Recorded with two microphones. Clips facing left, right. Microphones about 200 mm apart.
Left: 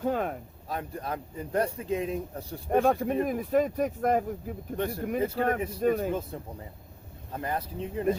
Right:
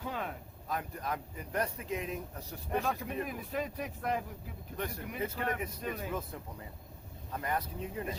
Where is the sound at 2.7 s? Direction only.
50° left (ahead or behind).